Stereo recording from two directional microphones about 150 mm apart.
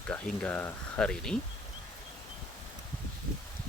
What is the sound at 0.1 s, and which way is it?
Speech, 10° left (ahead or behind).